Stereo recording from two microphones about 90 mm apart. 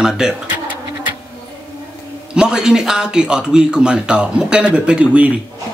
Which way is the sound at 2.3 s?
10° right (ahead or behind).